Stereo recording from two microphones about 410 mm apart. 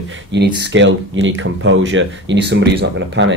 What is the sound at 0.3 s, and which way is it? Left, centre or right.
Speech, right.